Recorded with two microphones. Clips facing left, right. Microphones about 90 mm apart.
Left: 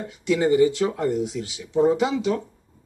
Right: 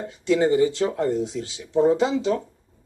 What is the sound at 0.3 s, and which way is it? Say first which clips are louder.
Speech: even; 30° right (ahead or behind).